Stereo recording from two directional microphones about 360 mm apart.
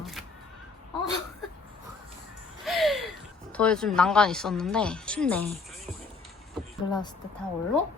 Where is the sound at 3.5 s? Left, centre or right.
Centre.